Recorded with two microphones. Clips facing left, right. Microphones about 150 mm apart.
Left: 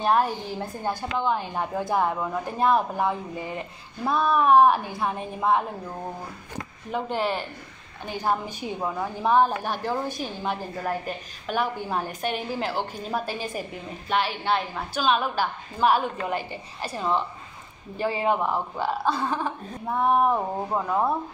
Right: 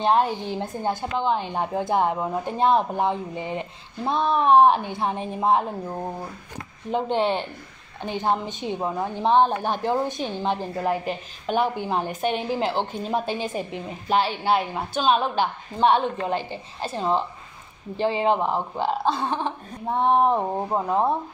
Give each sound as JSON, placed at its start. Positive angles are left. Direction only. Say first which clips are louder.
{"t": 0.0, "sound": "a woman's voice", "louder": "right 2 dB", "side_deg": -25}
{"t": 6.9, "sound": "a woman's voice", "louder": "right 4 dB", "side_deg": -25}
{"t": 11.7, "sound": "a woman's voice", "louder": "right 3 dB", "side_deg": -20}